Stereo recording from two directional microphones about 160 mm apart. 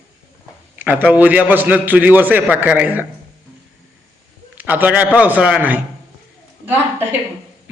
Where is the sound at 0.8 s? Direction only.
10° right (ahead or behind).